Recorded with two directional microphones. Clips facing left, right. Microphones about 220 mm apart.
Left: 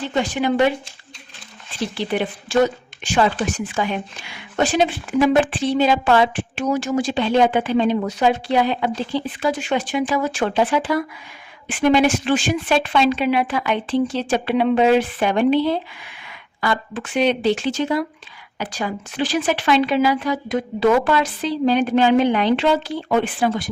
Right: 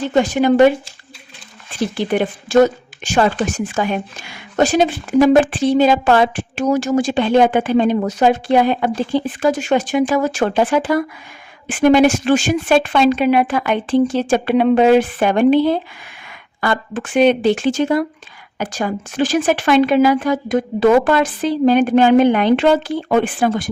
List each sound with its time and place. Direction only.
0.0 s a woman's voice: 45° right (ahead or behind)
1.8 s a woman's voice: 50° right (ahead or behind)